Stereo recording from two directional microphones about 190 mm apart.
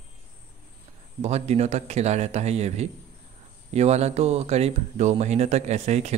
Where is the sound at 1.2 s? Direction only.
35° right (ahead or behind).